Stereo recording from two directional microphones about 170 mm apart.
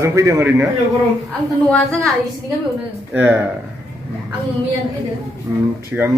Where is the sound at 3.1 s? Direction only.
10° right (ahead or behind).